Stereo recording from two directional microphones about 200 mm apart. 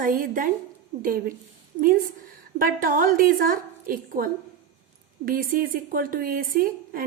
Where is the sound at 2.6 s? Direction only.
45° right (ahead or behind).